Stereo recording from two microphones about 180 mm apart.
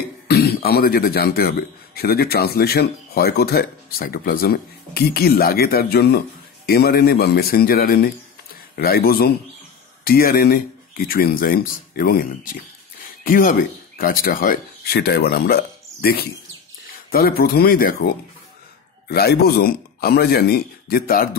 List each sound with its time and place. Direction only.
0.3 s speech: 60° left (ahead or behind)